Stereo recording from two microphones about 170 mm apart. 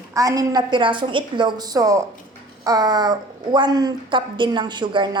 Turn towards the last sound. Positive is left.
turn(degrees=-25)  # may be behind; listen again after turning